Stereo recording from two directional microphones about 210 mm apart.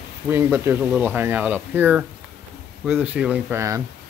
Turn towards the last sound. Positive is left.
turn(degrees=-10)  # may be behind; listen again after turning